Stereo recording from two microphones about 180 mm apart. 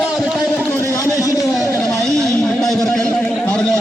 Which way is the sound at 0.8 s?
15° left (ahead or behind).